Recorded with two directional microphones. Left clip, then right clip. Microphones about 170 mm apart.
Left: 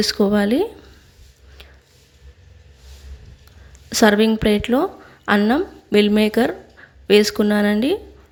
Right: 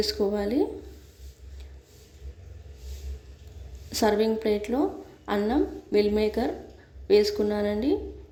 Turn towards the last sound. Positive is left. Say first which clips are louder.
# left 7 dB
turn(degrees=25)  # may be behind; listen again after turning